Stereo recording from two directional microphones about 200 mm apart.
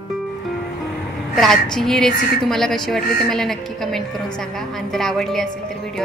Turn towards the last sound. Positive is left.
turn(degrees=0)  # may be behind; listen again after turning